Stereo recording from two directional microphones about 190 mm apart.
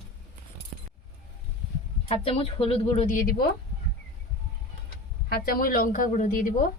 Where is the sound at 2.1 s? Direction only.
30° left (ahead or behind).